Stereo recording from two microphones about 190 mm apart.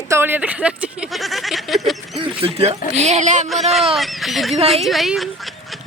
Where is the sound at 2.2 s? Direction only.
30° right (ahead or behind).